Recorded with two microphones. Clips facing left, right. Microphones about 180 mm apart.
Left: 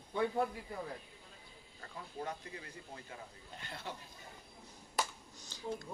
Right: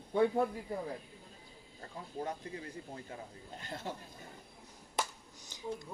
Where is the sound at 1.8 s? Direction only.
40° right (ahead or behind).